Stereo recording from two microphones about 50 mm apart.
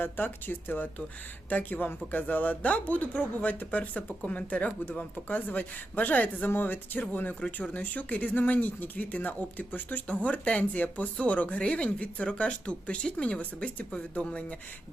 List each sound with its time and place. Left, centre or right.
0.0 s speech: left